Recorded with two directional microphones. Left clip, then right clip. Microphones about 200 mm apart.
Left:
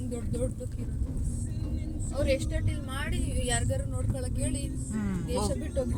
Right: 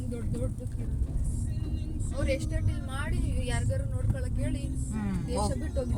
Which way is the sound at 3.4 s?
50° left (ahead or behind).